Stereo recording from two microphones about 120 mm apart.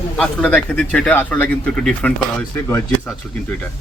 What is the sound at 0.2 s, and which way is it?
Speech, 10° left (ahead or behind).